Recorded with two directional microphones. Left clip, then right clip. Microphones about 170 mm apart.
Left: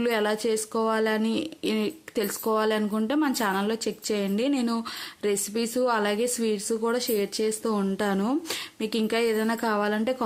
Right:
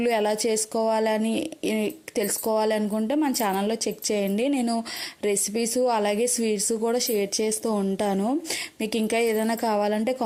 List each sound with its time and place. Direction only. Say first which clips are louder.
0.0 s a woman's voice: right 2 dB; 20° right (ahead or behind)